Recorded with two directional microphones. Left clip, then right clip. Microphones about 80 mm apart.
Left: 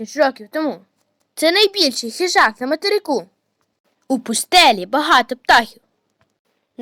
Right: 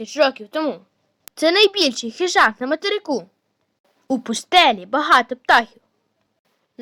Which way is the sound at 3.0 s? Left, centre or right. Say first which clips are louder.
Left 3 dB; left.